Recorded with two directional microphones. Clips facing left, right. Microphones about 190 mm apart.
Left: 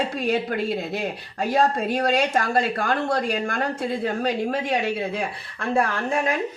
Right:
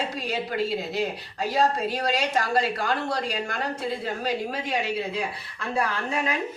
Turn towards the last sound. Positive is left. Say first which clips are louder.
# left 4 dB
turn(degrees=50)  # may be behind; listen again after turning